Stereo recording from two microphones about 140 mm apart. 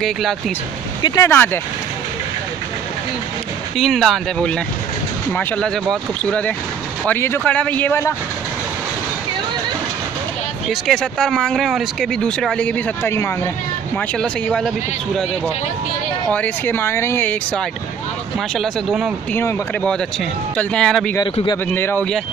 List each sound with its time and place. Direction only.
0.0 s speech: centre (ahead or behind)
1.0 s speech: 25° left (ahead or behind)
1.3 s speech: 15° left (ahead or behind)
3.7 s speech: centre (ahead or behind)
10.7 s speech: 5° left (ahead or behind)
13.9 s speech: 5° left (ahead or behind)
16.3 s speech: 10° left (ahead or behind)
18.5 s speech: centre (ahead or behind)
19.3 s speech: 10° left (ahead or behind)
21.2 s speech: 30° left (ahead or behind)
21.7 s speech: 15° left (ahead or behind)